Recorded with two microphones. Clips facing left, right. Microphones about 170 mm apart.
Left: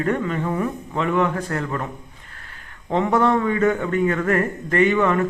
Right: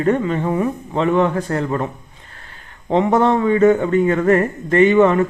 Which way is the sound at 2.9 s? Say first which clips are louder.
Right 4 dB; 25° right (ahead or behind).